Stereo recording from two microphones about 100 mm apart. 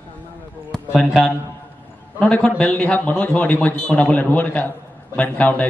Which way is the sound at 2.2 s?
10° left (ahead or behind).